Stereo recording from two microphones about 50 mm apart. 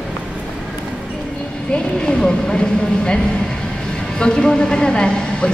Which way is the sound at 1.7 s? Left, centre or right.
Centre.